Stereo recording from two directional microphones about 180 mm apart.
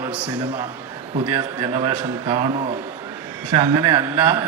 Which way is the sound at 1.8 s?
25° right (ahead or behind).